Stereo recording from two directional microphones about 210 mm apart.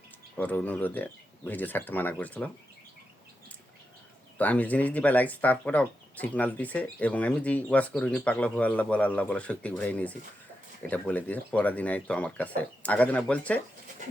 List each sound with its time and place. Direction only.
0.3 s speech: 10° left (ahead or behind)
4.4 s speech: 5° left (ahead or behind)